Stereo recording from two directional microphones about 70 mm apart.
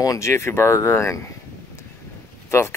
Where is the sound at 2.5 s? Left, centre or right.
Left.